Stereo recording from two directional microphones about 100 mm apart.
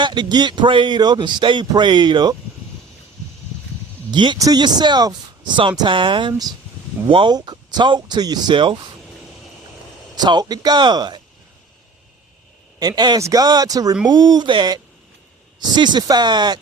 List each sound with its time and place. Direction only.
0.0 s speech: 50° right (ahead or behind)
4.1 s speech: 50° right (ahead or behind)
7.3 s speech: 45° right (ahead or behind)
10.2 s speech: 45° right (ahead or behind)
13.1 s speech: 35° right (ahead or behind)